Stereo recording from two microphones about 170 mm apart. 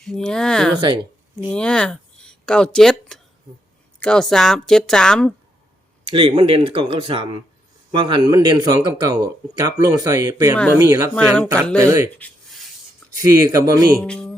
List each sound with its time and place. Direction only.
0.0 s a woman's voice: 5° left (ahead or behind)
6.1 s speech: 30° right (ahead or behind); by 11.1 s 15° right (ahead or behind)
11.1 s a woman's voice: 5° left (ahead or behind)
11.8 s speech: 20° right (ahead or behind)
13.5 s speech: 20° right (ahead or behind)
14.0 s music: 5° left (ahead or behind)